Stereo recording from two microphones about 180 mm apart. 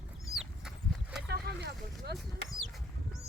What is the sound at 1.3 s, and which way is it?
Vehicle, 65° right (ahead or behind).